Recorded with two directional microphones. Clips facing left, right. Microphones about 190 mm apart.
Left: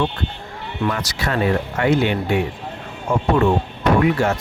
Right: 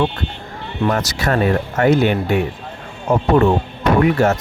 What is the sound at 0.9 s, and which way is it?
Speech, 45° right (ahead or behind).